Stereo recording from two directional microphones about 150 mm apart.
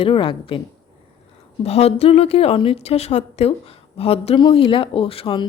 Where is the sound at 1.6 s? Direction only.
45° left (ahead or behind).